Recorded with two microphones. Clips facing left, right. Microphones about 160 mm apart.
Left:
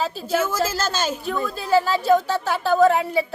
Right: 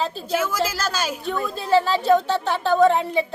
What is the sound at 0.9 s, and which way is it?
Speech, 25° left (ahead or behind).